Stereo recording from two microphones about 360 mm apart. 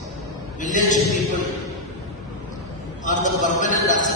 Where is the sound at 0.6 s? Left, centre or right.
Left.